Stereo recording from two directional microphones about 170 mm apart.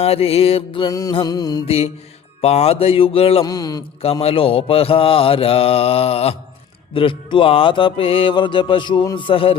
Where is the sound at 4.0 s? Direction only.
35° left (ahead or behind).